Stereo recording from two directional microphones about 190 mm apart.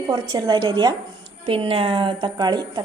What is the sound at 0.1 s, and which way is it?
A woman's voice, 20° right (ahead or behind).